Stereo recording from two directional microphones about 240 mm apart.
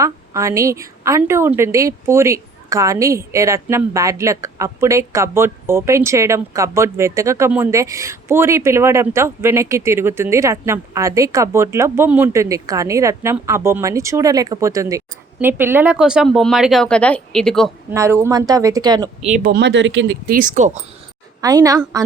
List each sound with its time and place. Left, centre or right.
0.0 s a woman's voice: centre
17.9 s a woman's voice: centre
19.3 s speech: right
21.4 s a woman's voice: centre